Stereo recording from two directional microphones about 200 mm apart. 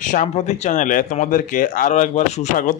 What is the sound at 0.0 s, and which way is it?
A man's voice, 40° left (ahead or behind).